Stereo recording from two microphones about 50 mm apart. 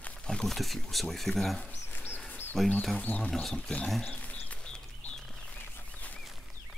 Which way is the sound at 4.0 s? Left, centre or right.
Left.